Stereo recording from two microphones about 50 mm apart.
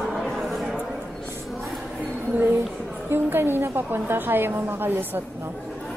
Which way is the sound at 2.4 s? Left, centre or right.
Right.